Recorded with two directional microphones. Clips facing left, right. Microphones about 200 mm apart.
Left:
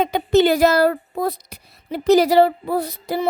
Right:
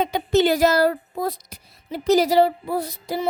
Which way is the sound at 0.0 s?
55° left (ahead or behind).